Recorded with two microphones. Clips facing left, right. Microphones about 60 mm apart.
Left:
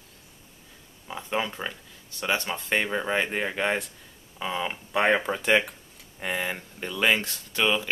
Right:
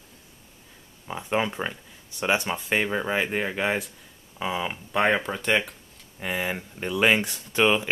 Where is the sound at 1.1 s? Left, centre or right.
Centre.